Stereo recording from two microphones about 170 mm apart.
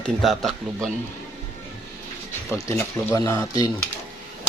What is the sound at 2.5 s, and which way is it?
Speech, 15° left (ahead or behind).